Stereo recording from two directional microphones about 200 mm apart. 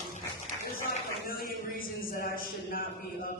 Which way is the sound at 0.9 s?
45° left (ahead or behind).